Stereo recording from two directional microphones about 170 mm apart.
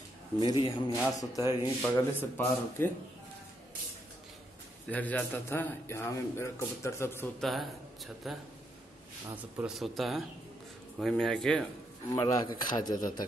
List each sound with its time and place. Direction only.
0.4 s a man's voice: 25° left (ahead or behind)
4.8 s a man's voice: 10° left (ahead or behind)
7.3 s speech: centre (ahead or behind)
9.6 s speech: centre (ahead or behind)
12.1 s a man's voice: 20° left (ahead or behind)